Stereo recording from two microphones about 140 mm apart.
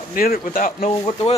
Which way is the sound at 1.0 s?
35° left (ahead or behind).